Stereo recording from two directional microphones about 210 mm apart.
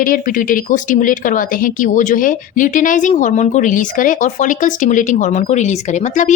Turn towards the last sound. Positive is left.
turn(degrees=35)  # may be behind; listen again after turning